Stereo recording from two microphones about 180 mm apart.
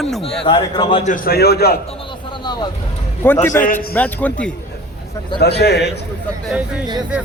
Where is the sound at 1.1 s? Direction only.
55° left (ahead or behind).